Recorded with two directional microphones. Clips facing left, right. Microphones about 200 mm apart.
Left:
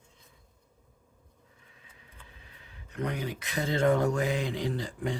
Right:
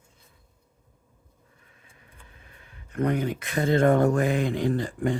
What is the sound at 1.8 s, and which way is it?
Speech, 50° right (ahead or behind).